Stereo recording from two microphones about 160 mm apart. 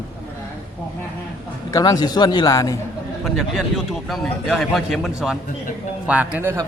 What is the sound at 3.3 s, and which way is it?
A man's voice, centre (ahead or behind).